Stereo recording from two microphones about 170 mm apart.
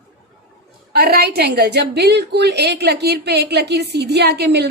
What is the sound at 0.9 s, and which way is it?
A woman's voice, 70° right (ahead or behind).